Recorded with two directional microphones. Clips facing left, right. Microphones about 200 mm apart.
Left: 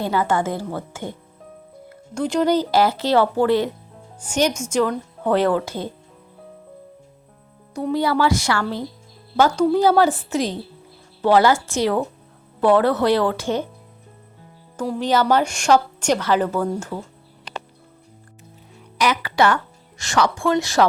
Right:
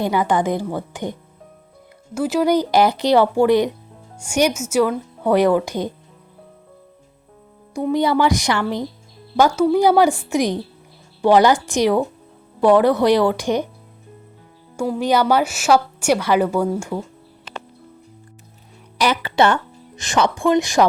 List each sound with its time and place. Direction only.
0.0 s a woman's voice: 15° right (ahead or behind)
2.1 s a woman's voice: 5° right (ahead or behind)
7.7 s a woman's voice: 10° right (ahead or behind)
14.8 s a woman's voice: 10° right (ahead or behind)
18.9 s a woman's voice: 30° right (ahead or behind)